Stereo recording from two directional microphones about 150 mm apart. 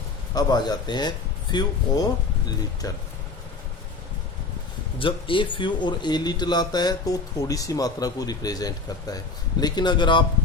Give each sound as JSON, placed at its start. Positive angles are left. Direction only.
{"t": 0.3, "sound": "speech", "side_deg": 30}
{"t": 4.9, "sound": "speech", "side_deg": 35}